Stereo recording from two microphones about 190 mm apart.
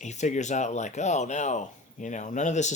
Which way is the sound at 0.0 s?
40° left (ahead or behind).